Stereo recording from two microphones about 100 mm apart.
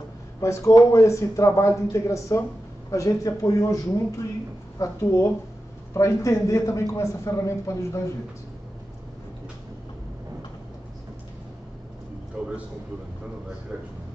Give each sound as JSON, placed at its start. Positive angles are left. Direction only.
{"t": 0.4, "sound": "a man's voice", "side_deg": 30}